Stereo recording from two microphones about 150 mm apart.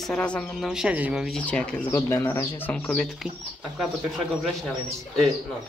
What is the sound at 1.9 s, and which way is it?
Speech, 20° left (ahead or behind).